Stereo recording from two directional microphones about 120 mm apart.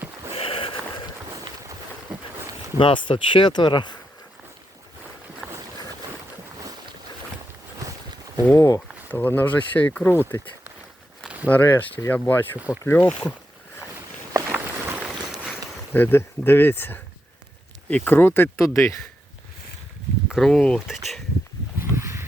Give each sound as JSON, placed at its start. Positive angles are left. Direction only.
{"t": 0.3, "sound": "a sound", "side_deg": 50}
{"t": 2.7, "sound": "speech", "side_deg": 45}
{"t": 8.5, "sound": "speech", "side_deg": 25}
{"t": 9.1, "sound": "speech", "side_deg": 15}
{"t": 11.4, "sound": "speech", "side_deg": 15}
{"t": 12.5, "sound": "speech", "side_deg": -10}
{"t": 12.8, "sound": "speech", "side_deg": 20}
{"t": 14.5, "sound": "a sound", "side_deg": -10}
{"t": 15.9, "sound": "speech", "side_deg": 15}
{"t": 20.2, "sound": "speech", "side_deg": 0}
{"t": 21.8, "sound": "a sound", "side_deg": -20}